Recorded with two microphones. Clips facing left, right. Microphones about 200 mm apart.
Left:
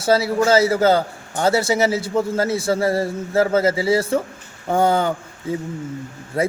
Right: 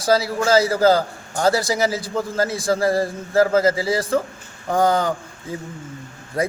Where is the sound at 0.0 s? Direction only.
25° left (ahead or behind).